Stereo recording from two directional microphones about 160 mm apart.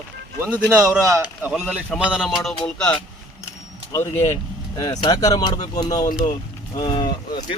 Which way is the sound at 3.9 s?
20° left (ahead or behind).